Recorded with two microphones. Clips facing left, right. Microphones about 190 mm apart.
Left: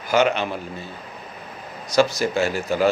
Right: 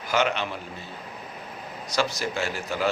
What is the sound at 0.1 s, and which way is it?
Speech, 45° left (ahead or behind).